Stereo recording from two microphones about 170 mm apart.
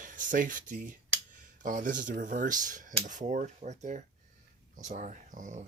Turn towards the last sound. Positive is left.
turn(degrees=-50)  # may be behind; listen again after turning